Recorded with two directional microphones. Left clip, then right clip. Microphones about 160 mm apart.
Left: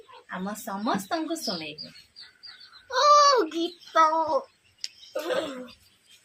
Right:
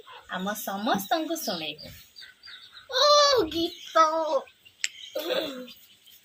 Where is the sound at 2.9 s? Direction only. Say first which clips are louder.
Left 2 dB; 10° left (ahead or behind).